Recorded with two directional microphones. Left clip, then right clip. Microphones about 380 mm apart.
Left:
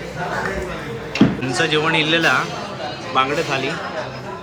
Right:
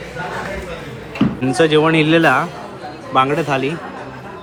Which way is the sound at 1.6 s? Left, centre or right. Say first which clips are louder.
Right 5 dB; centre.